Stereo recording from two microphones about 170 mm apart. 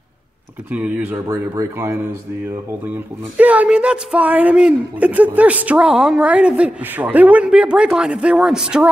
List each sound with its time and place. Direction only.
0.7 s speech: 10° right (ahead or behind)
1.1 s speech: 20° right (ahead or behind)
3.3 s speech: 10° right (ahead or behind)